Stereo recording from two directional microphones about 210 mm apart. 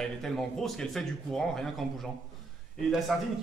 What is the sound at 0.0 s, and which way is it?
Speech, centre (ahead or behind).